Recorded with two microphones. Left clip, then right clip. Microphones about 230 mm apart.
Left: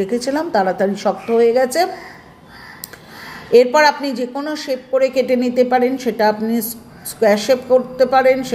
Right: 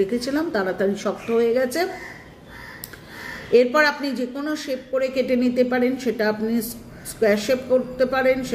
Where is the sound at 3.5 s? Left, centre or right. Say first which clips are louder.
Left 6 dB; centre.